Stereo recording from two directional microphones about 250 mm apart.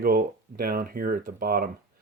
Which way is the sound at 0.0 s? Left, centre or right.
Right.